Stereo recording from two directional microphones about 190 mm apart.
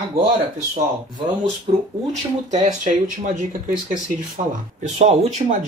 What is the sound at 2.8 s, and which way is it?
Speech, 45° right (ahead or behind).